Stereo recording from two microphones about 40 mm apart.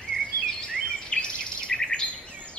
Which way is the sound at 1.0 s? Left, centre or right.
Left.